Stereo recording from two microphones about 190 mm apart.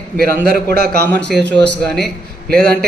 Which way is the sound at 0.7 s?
55° right (ahead or behind).